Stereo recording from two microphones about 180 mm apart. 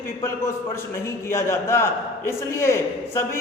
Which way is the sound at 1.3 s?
15° left (ahead or behind).